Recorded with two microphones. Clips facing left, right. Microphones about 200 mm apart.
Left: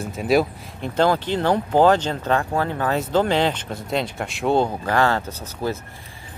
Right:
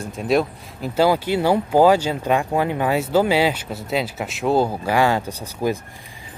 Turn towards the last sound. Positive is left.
turn(degrees=-15)  # may be behind; listen again after turning